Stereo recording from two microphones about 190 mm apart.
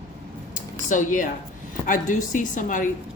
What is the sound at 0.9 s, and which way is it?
A woman's voice, 40° left (ahead or behind).